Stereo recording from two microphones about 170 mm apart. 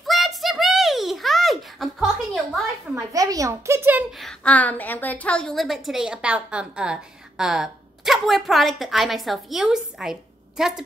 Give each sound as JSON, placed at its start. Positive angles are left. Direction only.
{"t": 0.0, "sound": "a sound", "side_deg": 0}
{"t": 2.9, "sound": "a woman's voice", "side_deg": -20}
{"t": 4.2, "sound": "a woman's voice", "side_deg": 10}